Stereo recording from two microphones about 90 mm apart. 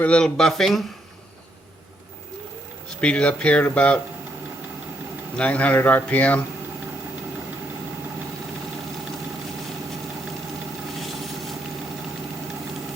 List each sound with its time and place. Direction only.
0.0 s speech: 10° left (ahead or behind)
2.9 s speech: 10° left (ahead or behind)
5.4 s speech: 15° left (ahead or behind)